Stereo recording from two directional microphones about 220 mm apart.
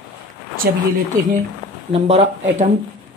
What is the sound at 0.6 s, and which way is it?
Speech, 45° right (ahead or behind).